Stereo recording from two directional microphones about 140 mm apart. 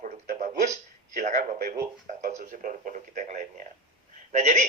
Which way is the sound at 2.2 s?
65° right (ahead or behind).